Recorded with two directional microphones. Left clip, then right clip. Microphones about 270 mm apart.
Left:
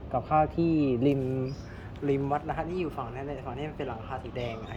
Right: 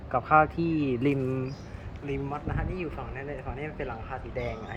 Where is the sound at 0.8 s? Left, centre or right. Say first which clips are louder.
Left 1 dB; centre.